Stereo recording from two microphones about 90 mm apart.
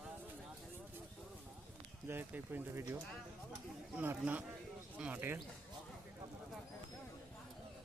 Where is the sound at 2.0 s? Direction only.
25° right (ahead or behind).